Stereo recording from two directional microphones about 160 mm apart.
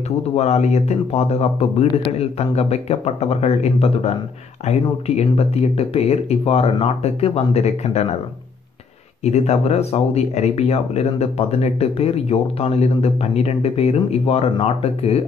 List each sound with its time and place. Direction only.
0.4 s speech: 45° left (ahead or behind)
9.2 s speech: 45° left (ahead or behind)